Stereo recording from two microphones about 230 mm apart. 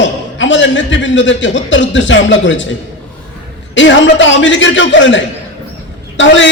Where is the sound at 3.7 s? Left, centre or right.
Left.